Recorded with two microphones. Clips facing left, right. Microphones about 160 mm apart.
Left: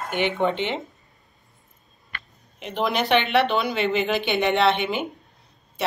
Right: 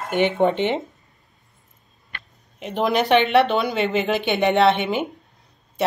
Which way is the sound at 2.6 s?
45° right (ahead or behind).